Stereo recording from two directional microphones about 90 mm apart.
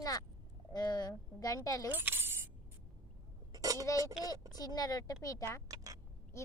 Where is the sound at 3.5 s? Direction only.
40° right (ahead or behind).